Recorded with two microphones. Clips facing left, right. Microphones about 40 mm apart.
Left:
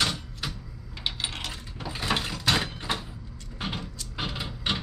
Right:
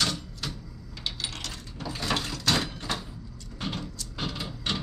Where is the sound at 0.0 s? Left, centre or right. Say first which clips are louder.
Left 1 dB; centre.